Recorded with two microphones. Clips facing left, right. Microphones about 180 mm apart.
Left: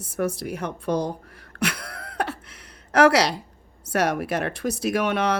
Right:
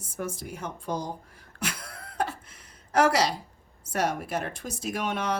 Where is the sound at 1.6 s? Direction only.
70° left (ahead or behind).